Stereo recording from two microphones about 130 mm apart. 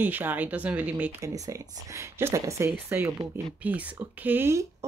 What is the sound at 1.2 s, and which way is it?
Speech, 25° right (ahead or behind).